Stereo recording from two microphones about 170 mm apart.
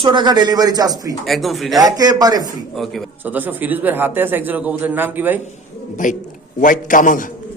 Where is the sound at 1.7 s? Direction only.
20° right (ahead or behind).